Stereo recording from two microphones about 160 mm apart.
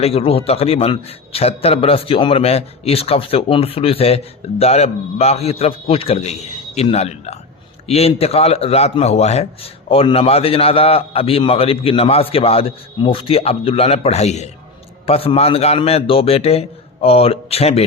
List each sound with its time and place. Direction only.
0.0 s a man's voice: 35° left (ahead or behind)